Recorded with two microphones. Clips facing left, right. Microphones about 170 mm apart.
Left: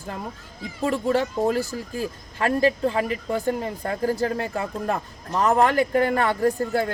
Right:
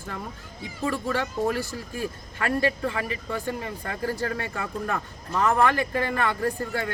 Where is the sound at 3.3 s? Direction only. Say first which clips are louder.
Left 6 dB; 40° left (ahead or behind).